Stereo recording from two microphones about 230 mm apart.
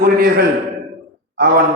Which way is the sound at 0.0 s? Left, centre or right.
Right.